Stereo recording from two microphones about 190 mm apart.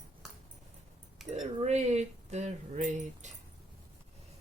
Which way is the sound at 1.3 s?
35° right (ahead or behind).